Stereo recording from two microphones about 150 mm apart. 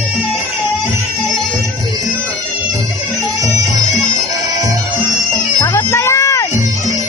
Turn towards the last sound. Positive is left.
turn(degrees=20)  # may be behind; listen again after turning